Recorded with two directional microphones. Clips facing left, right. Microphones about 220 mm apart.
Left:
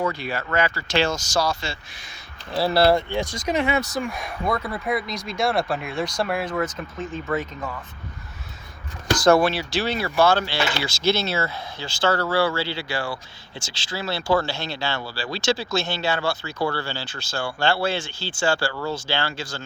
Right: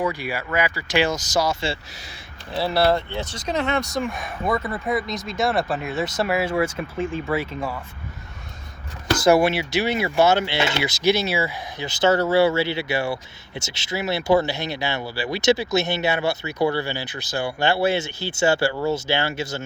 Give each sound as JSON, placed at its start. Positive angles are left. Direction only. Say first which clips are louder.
{"t": 0.0, "sound": "speech", "louder": "right 1 dB", "side_deg": -15}
{"t": 2.8, "sound": "speech", "louder": "left 2 dB", "side_deg": 15}
{"t": 9.4, "sound": "speech", "louder": "right 2 dB", "side_deg": -20}